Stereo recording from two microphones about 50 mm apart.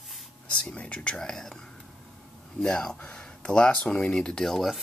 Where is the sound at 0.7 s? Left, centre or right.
Left.